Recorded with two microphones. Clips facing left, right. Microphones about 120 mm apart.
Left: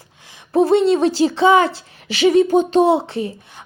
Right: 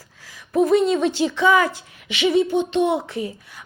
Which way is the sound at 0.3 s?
30° left (ahead or behind).